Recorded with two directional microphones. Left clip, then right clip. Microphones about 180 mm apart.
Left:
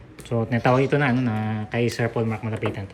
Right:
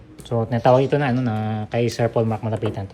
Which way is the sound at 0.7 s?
Centre (ahead or behind).